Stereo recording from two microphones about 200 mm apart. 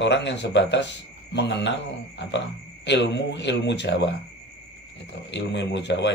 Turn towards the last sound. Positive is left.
turn(degrees=60)  # may be behind; listen again after turning